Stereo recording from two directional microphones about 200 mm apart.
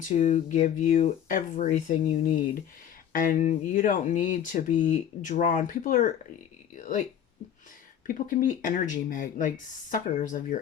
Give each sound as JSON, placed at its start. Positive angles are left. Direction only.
{"t": 0.1, "sound": "speech", "side_deg": 35}
{"t": 6.7, "sound": "a sound", "side_deg": 40}
{"t": 8.0, "sound": "speech", "side_deg": 40}